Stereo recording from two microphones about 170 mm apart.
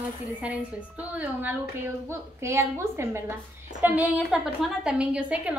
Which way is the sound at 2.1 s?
15° right (ahead or behind).